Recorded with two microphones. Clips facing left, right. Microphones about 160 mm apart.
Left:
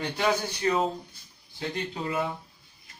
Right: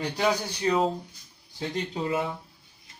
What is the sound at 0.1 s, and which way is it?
Speech, 15° right (ahead or behind).